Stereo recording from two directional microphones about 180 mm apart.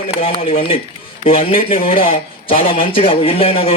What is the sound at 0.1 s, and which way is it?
A man's voice, 30° left (ahead or behind).